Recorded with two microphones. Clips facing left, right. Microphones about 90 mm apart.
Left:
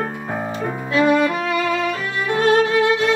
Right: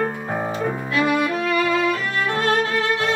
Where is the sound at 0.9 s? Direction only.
25° left (ahead or behind).